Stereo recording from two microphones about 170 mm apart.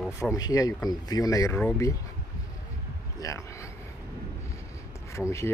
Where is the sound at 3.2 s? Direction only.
20° left (ahead or behind).